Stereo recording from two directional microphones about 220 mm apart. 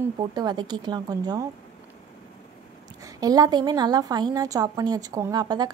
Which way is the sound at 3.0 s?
15° right (ahead or behind).